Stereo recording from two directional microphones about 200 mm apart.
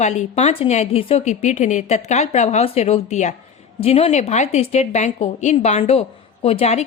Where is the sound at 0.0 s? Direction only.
35° left (ahead or behind).